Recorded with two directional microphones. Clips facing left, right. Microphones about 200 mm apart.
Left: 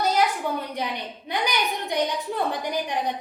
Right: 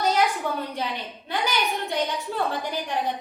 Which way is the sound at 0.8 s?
15° left (ahead or behind).